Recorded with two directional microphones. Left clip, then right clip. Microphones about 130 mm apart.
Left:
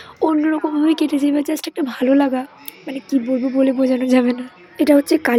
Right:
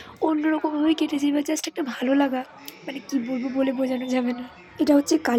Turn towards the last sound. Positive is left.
turn(degrees=30)  # may be behind; listen again after turning